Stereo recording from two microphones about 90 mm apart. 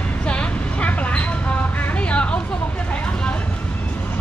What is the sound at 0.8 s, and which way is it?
Vehicle, 15° left (ahead or behind).